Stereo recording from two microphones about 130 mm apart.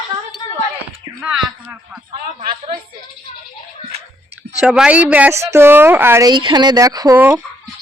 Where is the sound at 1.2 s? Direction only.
5° right (ahead or behind).